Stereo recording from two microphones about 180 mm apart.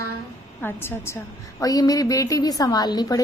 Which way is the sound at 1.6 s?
20° left (ahead or behind).